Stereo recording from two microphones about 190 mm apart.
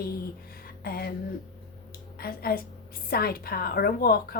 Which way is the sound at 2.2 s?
55° left (ahead or behind).